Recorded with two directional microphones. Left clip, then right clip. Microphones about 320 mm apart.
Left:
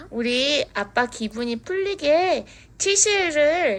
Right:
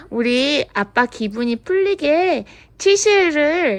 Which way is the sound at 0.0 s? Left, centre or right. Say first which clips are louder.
Right 4 dB; centre.